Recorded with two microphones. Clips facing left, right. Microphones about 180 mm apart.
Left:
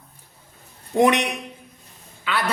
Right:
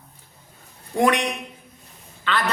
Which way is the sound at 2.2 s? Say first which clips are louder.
Right 1 dB; 10° left (ahead or behind).